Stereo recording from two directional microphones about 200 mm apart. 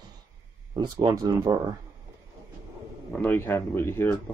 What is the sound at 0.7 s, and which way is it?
Speech, 15° right (ahead or behind).